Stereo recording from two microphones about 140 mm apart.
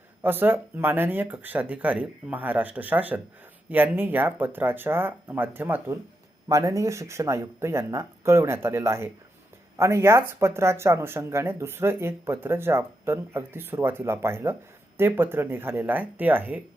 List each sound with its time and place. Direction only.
0.2 s speech: 15° right (ahead or behind)